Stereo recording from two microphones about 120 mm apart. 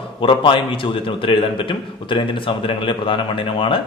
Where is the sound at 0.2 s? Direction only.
45° left (ahead or behind).